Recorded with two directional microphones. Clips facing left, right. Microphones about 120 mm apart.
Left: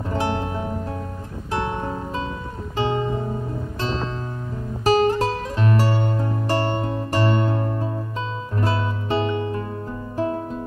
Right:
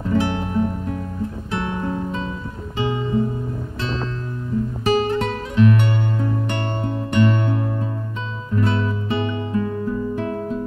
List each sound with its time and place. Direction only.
0.1 s music: 30° left (ahead or behind)